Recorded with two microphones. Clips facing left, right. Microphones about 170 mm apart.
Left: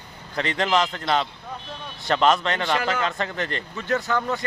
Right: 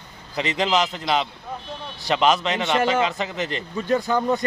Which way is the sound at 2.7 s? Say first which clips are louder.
Right 6 dB; 25° right (ahead or behind).